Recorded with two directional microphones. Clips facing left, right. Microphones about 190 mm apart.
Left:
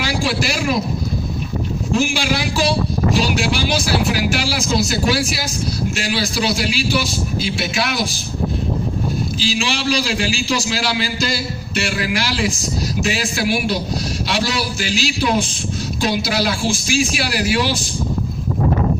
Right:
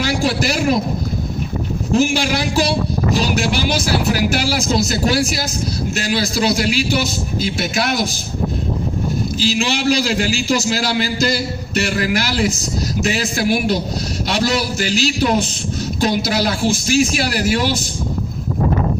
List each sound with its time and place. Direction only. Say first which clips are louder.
0.0 s a man's voice: right 2 dB; 45° right (ahead or behind)
1.9 s a man's voice: right 3 dB; 45° right (ahead or behind)
9.4 s a man's voice: right 4 dB; 45° right (ahead or behind)